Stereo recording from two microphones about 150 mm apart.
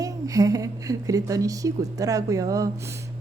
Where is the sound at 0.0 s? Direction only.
25° right (ahead or behind).